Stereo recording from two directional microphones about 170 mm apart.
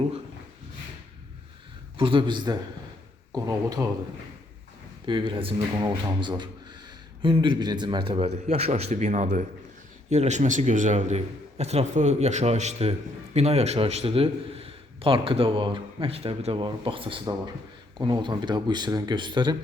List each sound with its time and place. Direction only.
2.0 s speech: 30° right (ahead or behind)
5.0 s a man's voice: 30° right (ahead or behind)